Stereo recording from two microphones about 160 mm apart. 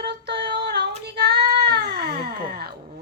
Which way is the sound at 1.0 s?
90° right.